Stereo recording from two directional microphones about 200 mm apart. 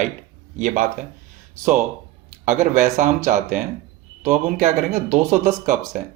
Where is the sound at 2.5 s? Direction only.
35° right (ahead or behind).